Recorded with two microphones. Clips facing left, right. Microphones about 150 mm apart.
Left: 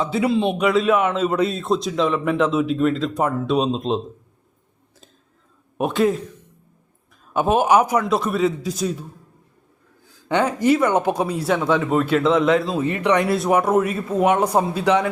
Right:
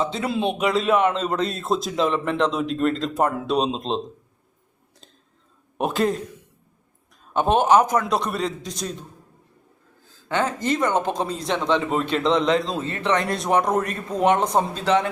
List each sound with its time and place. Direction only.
0.0 s a man's voice: 5° left (ahead or behind)
5.7 s a man's voice: centre (ahead or behind)
7.3 s speech: 10° left (ahead or behind)